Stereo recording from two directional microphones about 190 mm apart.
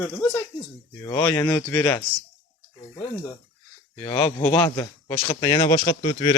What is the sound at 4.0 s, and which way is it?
Speech, 10° left (ahead or behind).